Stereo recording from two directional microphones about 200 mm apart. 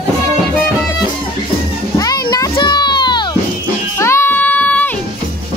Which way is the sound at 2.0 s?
20° left (ahead or behind).